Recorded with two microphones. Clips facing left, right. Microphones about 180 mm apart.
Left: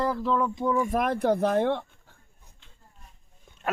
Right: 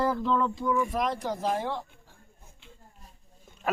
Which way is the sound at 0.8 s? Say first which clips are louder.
Left 4 dB; 50° left (ahead or behind).